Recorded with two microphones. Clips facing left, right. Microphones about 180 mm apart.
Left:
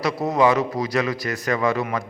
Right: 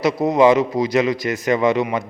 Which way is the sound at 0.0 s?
20° right (ahead or behind).